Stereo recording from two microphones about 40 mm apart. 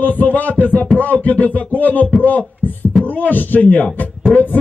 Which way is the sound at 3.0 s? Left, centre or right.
Left.